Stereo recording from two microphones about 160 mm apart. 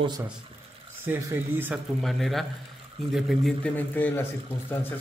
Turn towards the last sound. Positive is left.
turn(degrees=15)  # may be behind; listen again after turning